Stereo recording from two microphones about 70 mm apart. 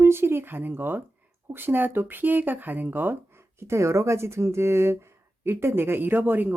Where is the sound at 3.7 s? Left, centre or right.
Right.